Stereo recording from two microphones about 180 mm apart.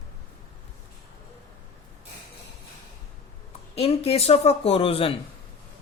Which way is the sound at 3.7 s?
35° left (ahead or behind).